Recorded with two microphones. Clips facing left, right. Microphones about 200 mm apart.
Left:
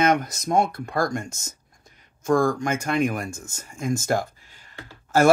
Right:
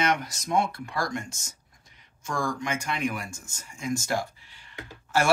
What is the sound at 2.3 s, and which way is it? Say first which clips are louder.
Speech: left 9 dB; 55° left (ahead or behind).